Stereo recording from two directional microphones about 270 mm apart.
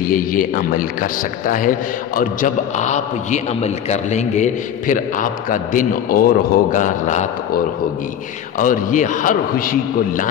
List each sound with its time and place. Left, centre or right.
0.0 s a man's voice: left